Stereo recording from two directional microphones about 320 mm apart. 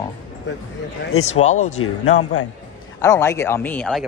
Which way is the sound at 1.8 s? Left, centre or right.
Left.